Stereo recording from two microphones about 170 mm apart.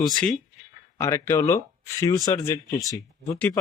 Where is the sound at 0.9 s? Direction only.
15° left (ahead or behind).